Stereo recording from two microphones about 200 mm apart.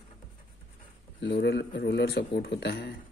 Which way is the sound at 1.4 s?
60° left (ahead or behind).